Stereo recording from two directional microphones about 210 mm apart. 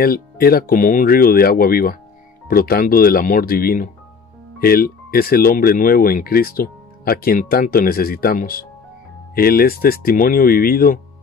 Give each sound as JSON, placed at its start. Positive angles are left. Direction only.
{"t": 0.0, "sound": "speech", "side_deg": 45}